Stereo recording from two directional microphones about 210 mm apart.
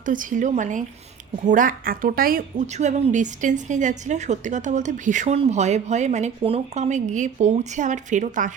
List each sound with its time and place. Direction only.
0.0 s a woman's voice: 40° right (ahead or behind)